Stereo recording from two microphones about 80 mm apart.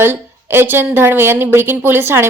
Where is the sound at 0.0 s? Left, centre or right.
Right.